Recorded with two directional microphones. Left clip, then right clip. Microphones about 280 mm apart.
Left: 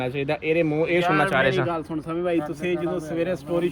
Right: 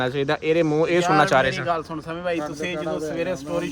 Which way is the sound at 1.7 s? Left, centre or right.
Centre.